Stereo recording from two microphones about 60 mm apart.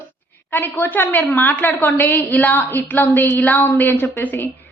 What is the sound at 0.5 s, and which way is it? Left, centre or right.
A woman's voice, left.